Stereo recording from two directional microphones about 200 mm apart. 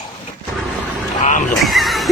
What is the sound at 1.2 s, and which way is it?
Speech, 40° left (ahead or behind).